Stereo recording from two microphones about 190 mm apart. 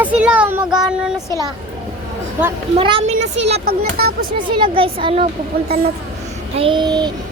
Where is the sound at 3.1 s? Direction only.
90° right.